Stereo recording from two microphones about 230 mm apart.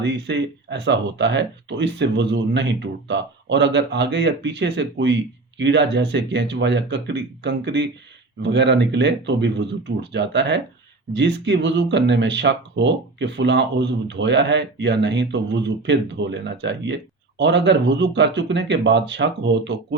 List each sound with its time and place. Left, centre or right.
0.0 s speech: right